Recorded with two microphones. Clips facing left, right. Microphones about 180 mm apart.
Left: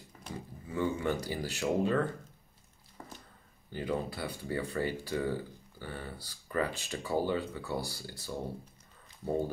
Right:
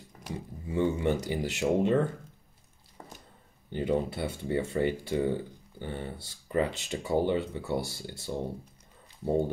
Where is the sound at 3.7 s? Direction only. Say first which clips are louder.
Right 6 dB; 25° right (ahead or behind).